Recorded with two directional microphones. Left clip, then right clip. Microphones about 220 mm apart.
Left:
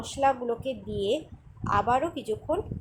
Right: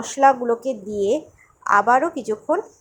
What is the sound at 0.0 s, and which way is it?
A woman's voice, 25° right (ahead or behind).